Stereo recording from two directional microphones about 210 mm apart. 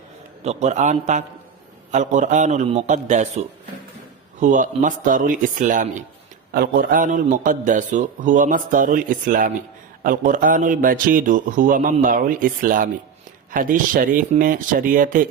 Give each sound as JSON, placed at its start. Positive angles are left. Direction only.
{"t": 0.4, "sound": "a man's voice", "side_deg": -35}